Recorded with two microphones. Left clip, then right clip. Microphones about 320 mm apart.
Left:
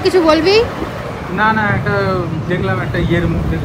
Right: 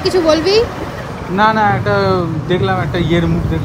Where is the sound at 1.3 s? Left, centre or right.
Centre.